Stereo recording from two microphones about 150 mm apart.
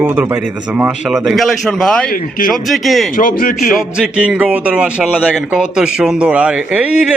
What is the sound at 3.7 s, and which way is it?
Speech, 5° right (ahead or behind).